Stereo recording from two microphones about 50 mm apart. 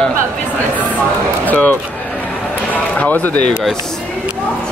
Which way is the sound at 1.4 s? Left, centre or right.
Left.